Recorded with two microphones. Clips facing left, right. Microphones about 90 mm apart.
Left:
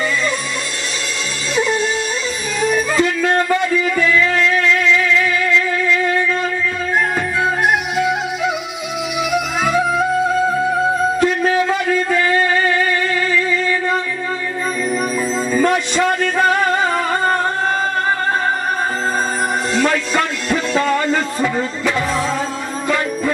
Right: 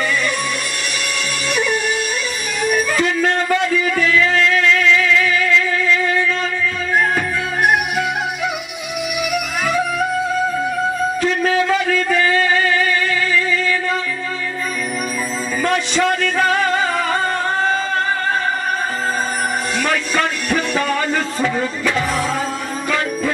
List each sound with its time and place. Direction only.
1.5 s music: 25° left (ahead or behind)
7.4 s music: 25° left (ahead or behind)
9.3 s music: 20° left (ahead or behind)
11.4 s a sound: 25° left (ahead or behind)
15.7 s a sound: 15° left (ahead or behind)
19.7 s music: 25° left (ahead or behind)